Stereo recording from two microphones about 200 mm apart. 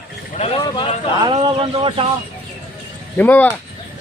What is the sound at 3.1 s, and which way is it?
Speech, 10° left (ahead or behind).